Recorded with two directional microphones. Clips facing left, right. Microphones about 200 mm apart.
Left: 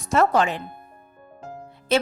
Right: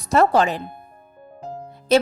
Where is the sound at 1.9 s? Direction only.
40° right (ahead or behind).